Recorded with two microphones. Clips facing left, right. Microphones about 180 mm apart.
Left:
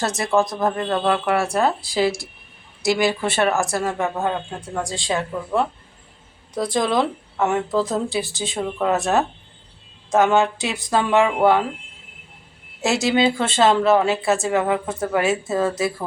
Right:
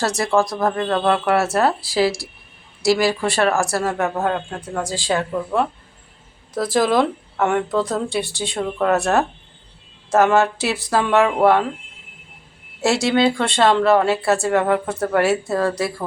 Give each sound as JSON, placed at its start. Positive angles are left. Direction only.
{"t": 0.0, "sound": "speech", "side_deg": 20}
{"t": 0.9, "sound": "a woman's voice", "side_deg": 0}
{"t": 3.1, "sound": "speech", "side_deg": 20}
{"t": 3.8, "sound": "a woman's voice", "side_deg": -5}
{"t": 12.8, "sound": "a woman's voice", "side_deg": 0}
{"t": 15.4, "sound": "speech", "side_deg": 20}
{"t": 15.7, "sound": "a woman's voice", "side_deg": 5}